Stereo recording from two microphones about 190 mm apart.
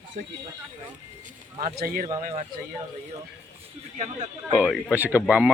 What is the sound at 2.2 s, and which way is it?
Speech, 35° right (ahead or behind).